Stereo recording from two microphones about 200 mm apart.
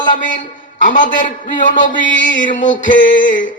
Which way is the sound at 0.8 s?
40° left (ahead or behind).